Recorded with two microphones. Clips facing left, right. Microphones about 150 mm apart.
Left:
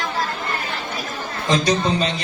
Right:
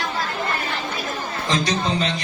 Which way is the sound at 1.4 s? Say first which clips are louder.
Left 4 dB; 20° left (ahead or behind).